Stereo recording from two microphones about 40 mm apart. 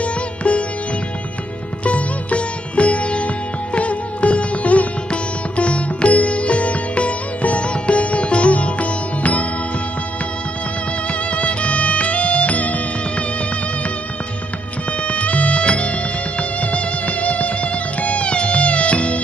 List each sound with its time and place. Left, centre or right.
0.0 s music: left
1.9 s sitar: left
3.7 s music: left
11.3 s music: left
15.0 s music: left
15.6 s music: left